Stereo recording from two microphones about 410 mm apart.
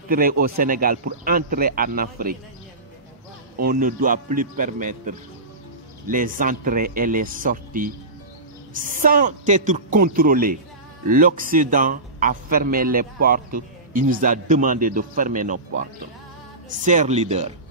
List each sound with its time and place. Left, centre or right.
0.1 s a man's voice: right
3.6 s a man's voice: centre
16.6 s speech: centre